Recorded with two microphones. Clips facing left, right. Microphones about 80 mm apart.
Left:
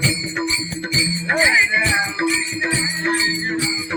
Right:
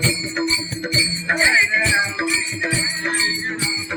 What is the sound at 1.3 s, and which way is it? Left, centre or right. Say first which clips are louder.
Jingle bell: left 1 dB; centre.